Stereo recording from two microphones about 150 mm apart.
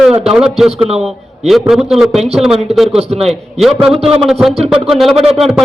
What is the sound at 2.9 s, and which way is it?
Speech, 40° right (ahead or behind).